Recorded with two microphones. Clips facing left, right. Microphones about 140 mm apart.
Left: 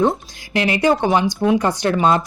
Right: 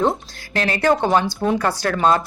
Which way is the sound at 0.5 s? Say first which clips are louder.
Left 2 dB; 15° left (ahead or behind).